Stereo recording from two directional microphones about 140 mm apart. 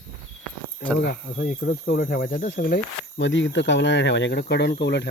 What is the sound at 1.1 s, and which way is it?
Speech, 85° left.